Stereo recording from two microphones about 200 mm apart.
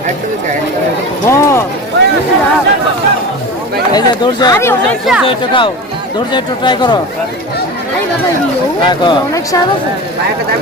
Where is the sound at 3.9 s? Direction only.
20° left (ahead or behind).